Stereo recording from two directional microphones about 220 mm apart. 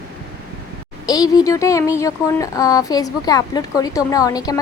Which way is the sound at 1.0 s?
15° left (ahead or behind).